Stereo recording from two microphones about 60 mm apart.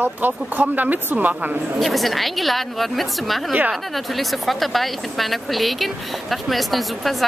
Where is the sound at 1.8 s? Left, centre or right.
Centre.